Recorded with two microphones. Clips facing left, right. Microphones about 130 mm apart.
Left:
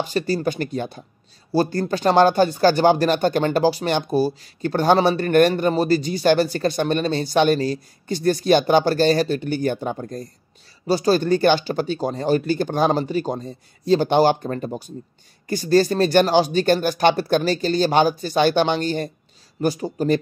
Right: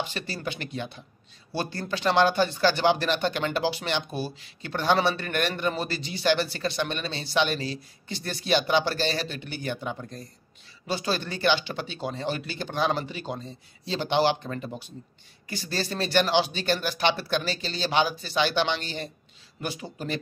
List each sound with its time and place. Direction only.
0.0 s speech: 40° left (ahead or behind)